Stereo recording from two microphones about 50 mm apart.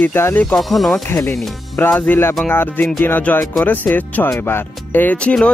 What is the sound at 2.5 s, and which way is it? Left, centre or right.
Speech, left.